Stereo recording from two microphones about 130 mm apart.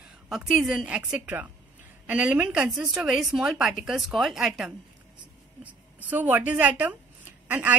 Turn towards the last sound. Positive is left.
turn(degrees=-10)  # may be behind; listen again after turning